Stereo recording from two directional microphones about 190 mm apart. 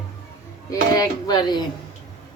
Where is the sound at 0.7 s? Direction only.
20° left (ahead or behind).